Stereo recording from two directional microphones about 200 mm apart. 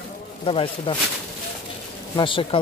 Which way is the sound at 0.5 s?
25° left (ahead or behind).